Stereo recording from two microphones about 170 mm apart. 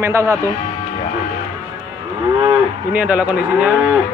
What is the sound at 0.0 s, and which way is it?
Speech, 15° right (ahead or behind).